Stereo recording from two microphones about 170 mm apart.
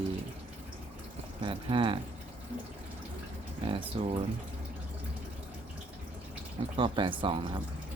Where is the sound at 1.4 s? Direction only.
30° right (ahead or behind).